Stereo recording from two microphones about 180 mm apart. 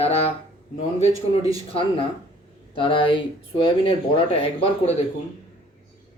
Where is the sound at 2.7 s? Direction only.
30° left (ahead or behind).